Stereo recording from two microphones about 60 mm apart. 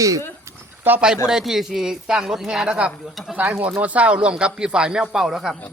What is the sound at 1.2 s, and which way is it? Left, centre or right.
Speech, centre.